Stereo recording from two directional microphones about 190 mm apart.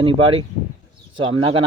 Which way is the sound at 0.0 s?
30° right (ahead or behind).